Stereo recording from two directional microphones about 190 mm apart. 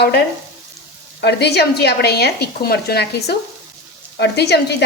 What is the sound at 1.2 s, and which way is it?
A woman's voice, 60° left (ahead or behind).